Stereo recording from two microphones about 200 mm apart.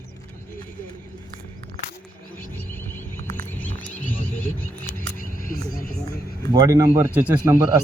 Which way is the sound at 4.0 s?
45° left (ahead or behind).